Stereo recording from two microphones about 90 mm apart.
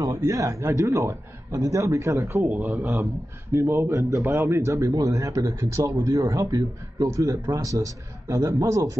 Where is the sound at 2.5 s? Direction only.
20° right (ahead or behind).